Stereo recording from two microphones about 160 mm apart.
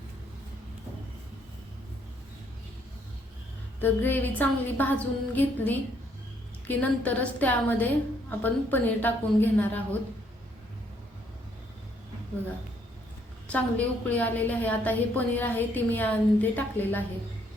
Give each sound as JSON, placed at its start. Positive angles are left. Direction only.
{"t": 3.8, "sound": "a woman's voice", "side_deg": 10}
{"t": 13.5, "sound": "a woman's voice", "side_deg": 10}